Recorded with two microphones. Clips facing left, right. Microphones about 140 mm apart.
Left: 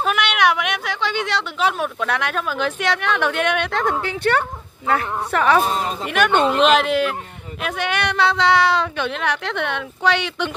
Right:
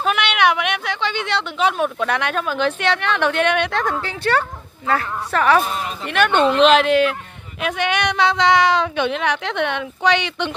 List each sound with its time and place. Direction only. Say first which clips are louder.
0.0 s speech: right 1 dB; 5° left (ahead or behind)
3.8 s a woman's voice: left 2 dB; 15° left (ahead or behind)
5.7 s speech: left 3 dB; 30° left (ahead or behind)
6.0 s a woman's voice: right 2 dB; 10° left (ahead or behind)